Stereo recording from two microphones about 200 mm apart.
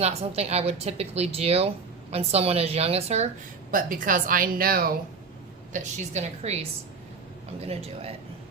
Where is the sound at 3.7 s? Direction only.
45° right (ahead or behind).